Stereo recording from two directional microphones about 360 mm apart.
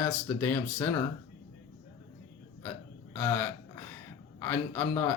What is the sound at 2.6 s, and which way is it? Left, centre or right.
Hiccup, centre.